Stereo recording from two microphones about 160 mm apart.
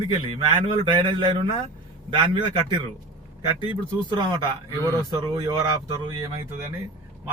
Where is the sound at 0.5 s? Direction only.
30° right (ahead or behind).